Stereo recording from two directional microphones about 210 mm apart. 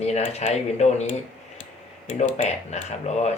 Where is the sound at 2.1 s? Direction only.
30° left (ahead or behind).